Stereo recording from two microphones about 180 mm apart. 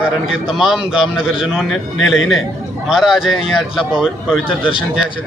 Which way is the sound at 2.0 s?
90° left.